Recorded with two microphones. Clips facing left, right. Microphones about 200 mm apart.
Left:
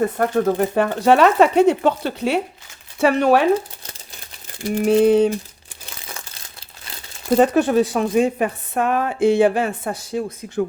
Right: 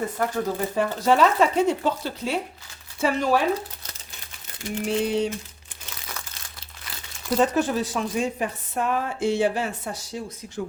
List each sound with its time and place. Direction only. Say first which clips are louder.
0.0 s speech: left 7 dB; 60° left (ahead or behind)
4.8 s a sound: left 10 dB; 55° left (ahead or behind)
7.3 s speech: left 6 dB; 60° left (ahead or behind)